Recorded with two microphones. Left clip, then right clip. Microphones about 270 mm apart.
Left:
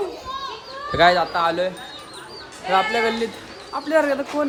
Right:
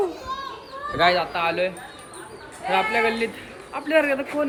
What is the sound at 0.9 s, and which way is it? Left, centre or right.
Speech, centre.